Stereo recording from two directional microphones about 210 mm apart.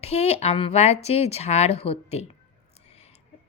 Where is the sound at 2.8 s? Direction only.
30° left (ahead or behind).